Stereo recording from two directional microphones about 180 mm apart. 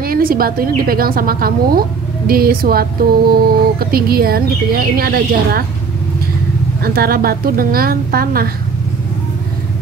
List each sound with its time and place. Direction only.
0.0 s a woman's voice: 55° right (ahead or behind)
6.8 s a woman's voice: 55° right (ahead or behind)